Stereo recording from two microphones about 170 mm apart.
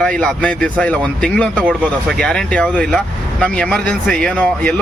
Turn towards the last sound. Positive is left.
turn(degrees=5)  # may be behind; listen again after turning